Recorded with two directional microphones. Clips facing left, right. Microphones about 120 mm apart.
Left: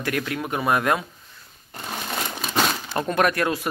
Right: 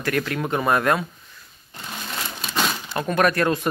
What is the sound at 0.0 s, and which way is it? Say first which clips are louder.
Speech: right 2 dB; 10° left (ahead or behind).